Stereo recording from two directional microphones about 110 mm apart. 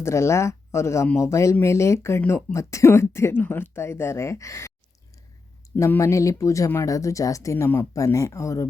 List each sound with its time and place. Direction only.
0.0 s speech: 25° left (ahead or behind)
6.0 s speech: 30° left (ahead or behind)